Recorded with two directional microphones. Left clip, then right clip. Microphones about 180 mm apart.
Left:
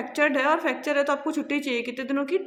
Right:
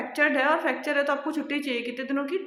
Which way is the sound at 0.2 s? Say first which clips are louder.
Left 1 dB; 30° left (ahead or behind).